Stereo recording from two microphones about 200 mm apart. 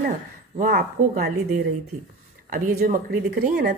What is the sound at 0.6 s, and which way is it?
Speech, 50° right (ahead or behind).